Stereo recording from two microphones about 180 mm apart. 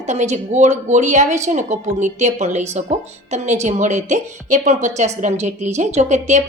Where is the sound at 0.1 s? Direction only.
40° right (ahead or behind).